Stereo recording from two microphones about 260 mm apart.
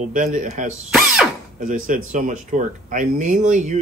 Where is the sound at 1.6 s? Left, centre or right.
Right.